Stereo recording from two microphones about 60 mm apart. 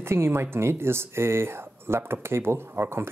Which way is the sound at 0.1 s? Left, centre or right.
Right.